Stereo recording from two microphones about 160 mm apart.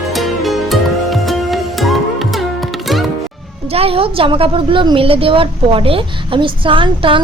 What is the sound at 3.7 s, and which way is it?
A woman's voice, 35° right (ahead or behind).